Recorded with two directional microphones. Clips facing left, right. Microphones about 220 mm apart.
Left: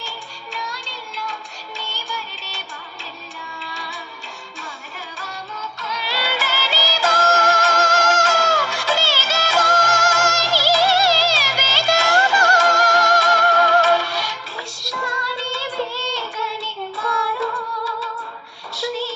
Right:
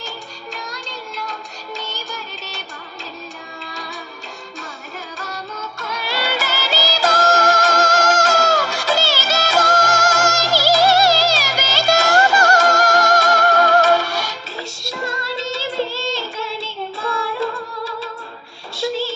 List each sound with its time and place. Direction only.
0.5 s music: 40° right (ahead or behind)
3.6 s music: 45° right (ahead or behind)
5.1 s music: 40° right (ahead or behind)
14.5 s music: 25° right (ahead or behind)
18.8 s a sound: 25° right (ahead or behind)